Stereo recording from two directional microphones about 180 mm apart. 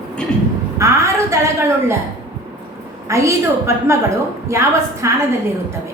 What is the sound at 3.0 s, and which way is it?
A woman's voice, 15° right (ahead or behind).